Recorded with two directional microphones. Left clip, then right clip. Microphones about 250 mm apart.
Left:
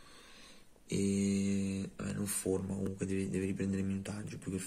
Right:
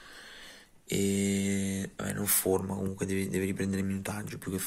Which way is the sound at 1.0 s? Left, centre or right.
Right.